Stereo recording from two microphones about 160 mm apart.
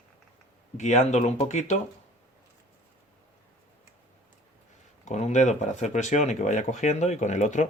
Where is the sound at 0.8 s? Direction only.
45° left (ahead or behind).